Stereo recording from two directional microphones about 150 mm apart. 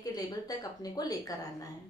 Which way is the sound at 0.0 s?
25° left (ahead or behind).